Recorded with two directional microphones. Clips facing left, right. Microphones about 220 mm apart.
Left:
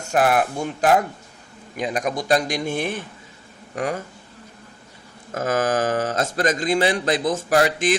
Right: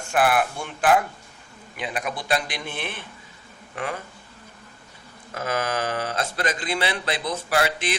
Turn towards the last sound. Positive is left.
turn(degrees=45)  # may be behind; listen again after turning